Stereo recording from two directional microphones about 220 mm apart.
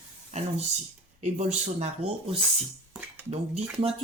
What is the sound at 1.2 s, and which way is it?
Speech, 30° right (ahead or behind).